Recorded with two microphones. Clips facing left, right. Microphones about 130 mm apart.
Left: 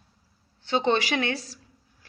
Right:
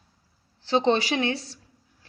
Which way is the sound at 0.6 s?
35° right (ahead or behind).